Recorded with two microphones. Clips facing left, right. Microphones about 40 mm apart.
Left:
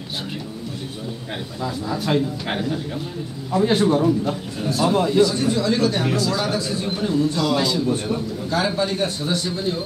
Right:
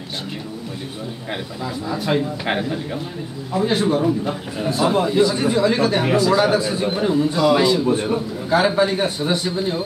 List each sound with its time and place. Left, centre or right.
1.3 s a man's voice: centre
3.5 s a man's voice: centre
4.9 s a man's voice: centre